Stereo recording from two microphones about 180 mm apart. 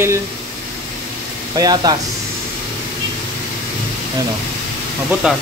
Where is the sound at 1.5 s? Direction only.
20° right (ahead or behind).